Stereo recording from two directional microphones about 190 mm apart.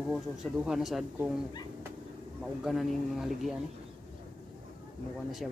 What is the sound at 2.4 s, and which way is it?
Speech, centre (ahead or behind).